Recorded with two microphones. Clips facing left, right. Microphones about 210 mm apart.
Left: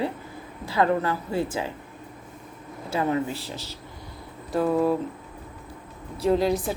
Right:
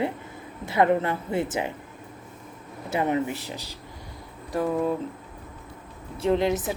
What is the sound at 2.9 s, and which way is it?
Speech, 20° right (ahead or behind).